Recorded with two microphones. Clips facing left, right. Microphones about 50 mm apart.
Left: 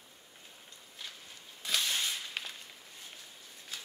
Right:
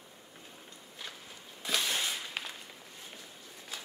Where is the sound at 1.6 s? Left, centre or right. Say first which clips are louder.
Right 1 dB; centre.